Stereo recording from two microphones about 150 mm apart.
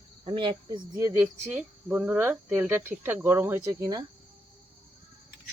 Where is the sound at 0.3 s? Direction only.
35° right (ahead or behind).